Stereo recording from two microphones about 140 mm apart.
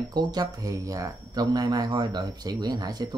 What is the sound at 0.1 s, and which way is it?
Speech, 30° right (ahead or behind).